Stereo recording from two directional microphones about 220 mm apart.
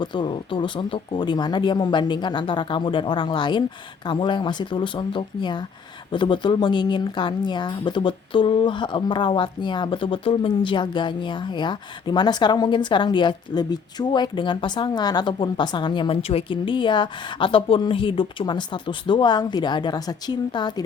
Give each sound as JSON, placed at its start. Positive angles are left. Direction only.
{"t": 0.0, "sound": "speech", "side_deg": 20}